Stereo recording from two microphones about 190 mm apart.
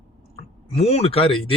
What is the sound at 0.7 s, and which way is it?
Speech, 30° left (ahead or behind).